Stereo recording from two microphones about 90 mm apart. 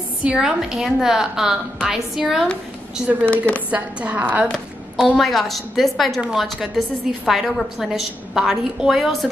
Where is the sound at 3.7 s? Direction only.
15° right (ahead or behind).